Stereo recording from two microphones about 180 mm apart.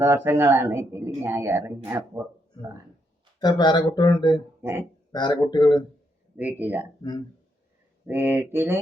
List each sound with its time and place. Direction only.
0.0 s speech: 15° right (ahead or behind)
3.4 s speech: 25° left (ahead or behind)
4.6 s speech: 15° right (ahead or behind)
5.1 s speech: 25° left (ahead or behind)
6.3 s speech: 10° right (ahead or behind)
8.0 s speech: 10° right (ahead or behind)